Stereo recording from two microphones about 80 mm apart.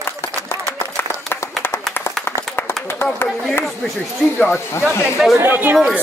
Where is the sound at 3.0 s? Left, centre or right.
Left.